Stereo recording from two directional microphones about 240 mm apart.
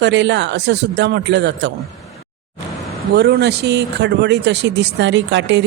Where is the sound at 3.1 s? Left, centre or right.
Right.